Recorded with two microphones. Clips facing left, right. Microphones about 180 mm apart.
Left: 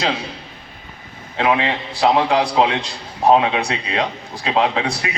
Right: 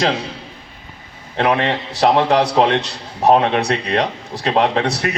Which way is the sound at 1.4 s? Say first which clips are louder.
Right 1 dB; 55° right (ahead or behind).